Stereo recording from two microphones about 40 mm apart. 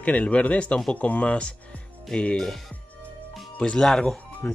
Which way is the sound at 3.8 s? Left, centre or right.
Centre.